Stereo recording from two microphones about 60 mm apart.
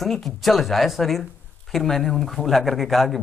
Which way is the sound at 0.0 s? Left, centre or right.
Centre.